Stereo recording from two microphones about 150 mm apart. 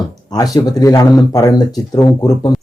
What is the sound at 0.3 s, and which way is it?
Speech, 25° left (ahead or behind).